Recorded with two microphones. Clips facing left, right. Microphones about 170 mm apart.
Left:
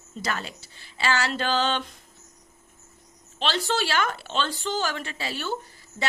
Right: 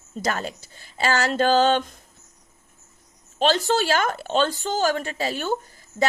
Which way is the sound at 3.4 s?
45° right (ahead or behind).